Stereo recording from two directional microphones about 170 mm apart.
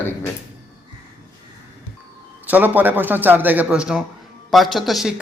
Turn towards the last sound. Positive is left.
turn(degrees=0)  # may be behind; listen again after turning